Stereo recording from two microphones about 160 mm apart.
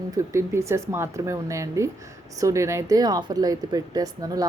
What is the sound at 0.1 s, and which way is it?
A woman's voice, 15° right (ahead or behind).